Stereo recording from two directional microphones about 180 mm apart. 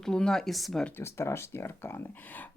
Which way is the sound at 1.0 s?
15° left (ahead or behind).